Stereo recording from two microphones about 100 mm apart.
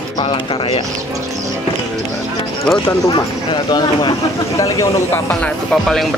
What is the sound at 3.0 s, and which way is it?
Speech, 45° left (ahead or behind).